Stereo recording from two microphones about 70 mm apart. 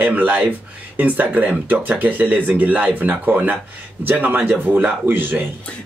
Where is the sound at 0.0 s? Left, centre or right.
Right.